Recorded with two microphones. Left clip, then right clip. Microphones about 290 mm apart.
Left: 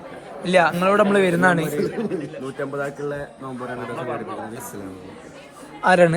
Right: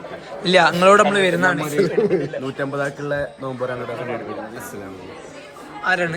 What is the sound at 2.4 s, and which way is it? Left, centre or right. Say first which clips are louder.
Speech: right 3 dB; right.